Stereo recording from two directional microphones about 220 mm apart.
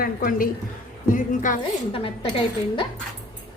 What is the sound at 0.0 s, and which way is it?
Speech, 40° left (ahead or behind).